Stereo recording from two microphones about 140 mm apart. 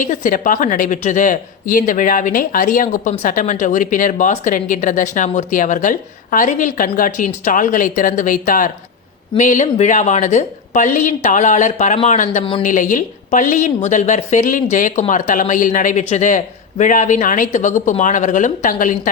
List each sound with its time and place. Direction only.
0.0 s a woman's voice: 65° left (ahead or behind)